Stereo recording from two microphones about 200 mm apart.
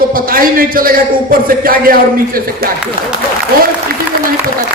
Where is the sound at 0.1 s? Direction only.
45° right (ahead or behind).